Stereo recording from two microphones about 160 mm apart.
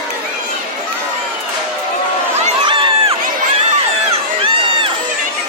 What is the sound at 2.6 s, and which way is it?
Crowd, 35° right (ahead or behind).